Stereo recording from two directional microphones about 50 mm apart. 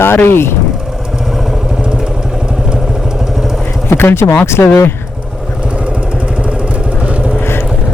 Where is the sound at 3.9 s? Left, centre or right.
Left.